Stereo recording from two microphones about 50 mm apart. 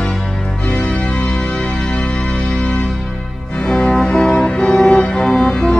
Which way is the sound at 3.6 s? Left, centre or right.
Centre.